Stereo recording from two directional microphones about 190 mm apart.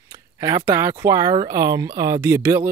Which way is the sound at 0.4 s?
15° right (ahead or behind).